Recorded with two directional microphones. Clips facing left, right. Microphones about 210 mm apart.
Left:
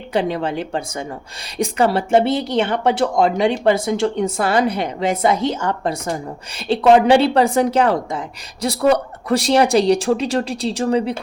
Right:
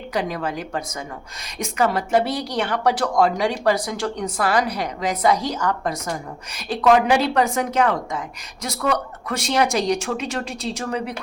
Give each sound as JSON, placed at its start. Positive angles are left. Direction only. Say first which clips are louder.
{"t": 0.1, "sound": "speech", "louder": "left 5 dB", "side_deg": 30}